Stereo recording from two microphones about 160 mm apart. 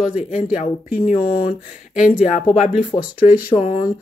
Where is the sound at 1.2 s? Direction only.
60° left (ahead or behind).